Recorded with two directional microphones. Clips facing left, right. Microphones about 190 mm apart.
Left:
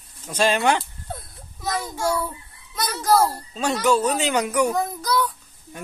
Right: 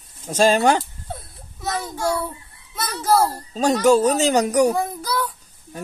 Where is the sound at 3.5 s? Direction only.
40° right (ahead or behind).